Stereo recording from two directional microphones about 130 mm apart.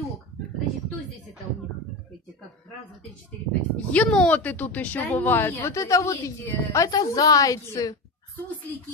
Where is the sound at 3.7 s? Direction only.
10° left (ahead or behind); by 7.9 s 25° left (ahead or behind).